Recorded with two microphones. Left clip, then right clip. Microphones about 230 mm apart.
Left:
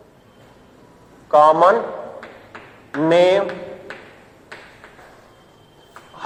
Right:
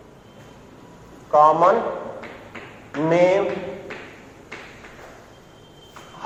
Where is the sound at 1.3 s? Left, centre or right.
Left.